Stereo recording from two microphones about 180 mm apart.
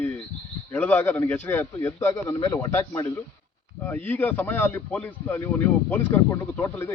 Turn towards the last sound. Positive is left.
turn(degrees=15)  # may be behind; listen again after turning